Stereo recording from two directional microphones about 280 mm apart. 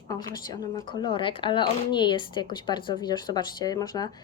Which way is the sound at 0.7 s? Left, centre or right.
Centre.